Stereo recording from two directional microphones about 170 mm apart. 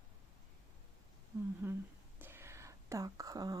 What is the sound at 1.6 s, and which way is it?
Speech, 15° right (ahead or behind).